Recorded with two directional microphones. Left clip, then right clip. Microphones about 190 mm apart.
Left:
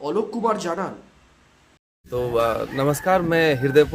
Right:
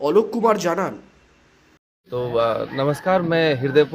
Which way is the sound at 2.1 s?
5° left (ahead or behind).